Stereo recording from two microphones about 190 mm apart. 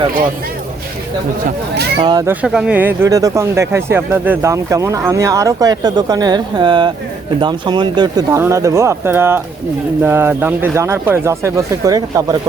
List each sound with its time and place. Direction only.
2.0 s speech: 20° right (ahead or behind)
2.3 s speech: 5° right (ahead or behind)